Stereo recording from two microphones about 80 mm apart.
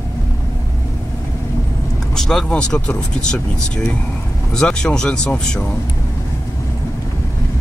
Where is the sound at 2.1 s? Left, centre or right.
Centre.